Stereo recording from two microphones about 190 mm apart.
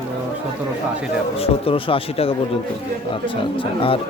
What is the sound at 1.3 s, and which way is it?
Speech, 30° left (ahead or behind).